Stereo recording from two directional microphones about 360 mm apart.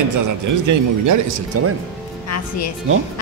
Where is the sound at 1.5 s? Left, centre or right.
Right.